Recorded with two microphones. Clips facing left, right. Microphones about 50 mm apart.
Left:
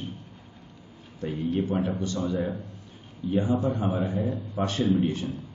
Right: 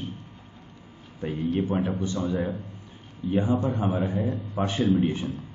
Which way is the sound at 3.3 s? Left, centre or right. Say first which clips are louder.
Right 1 dB; right.